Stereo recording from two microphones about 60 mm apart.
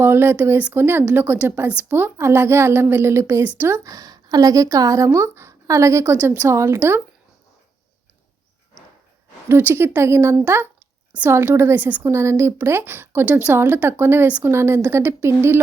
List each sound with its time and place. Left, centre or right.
0.0 s a woman's voice: right
3.8 s speech: right
6.1 s speech: right
6.5 s a woman's voice: right
9.5 s a woman's voice: right
10.4 s a woman's voice: right
11.8 s a woman's voice: right
12.0 s a woman's voice: right